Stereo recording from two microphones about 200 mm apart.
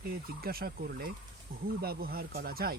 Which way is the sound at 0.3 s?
50° right (ahead or behind).